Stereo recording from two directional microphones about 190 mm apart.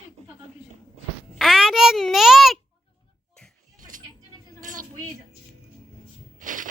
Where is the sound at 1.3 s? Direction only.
Centre (ahead or behind).